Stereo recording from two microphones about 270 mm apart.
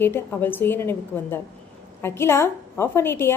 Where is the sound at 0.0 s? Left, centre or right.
Centre.